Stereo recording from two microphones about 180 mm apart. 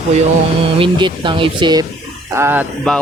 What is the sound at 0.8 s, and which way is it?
Speech, 25° right (ahead or behind).